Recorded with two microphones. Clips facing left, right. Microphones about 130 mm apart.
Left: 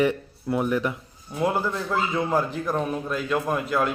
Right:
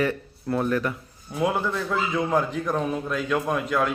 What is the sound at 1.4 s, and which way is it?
A man's voice, centre (ahead or behind).